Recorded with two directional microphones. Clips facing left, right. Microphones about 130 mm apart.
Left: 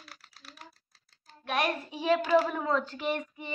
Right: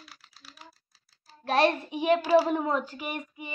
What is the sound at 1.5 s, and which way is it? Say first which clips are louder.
Speech: right 6 dB; 30° right (ahead or behind).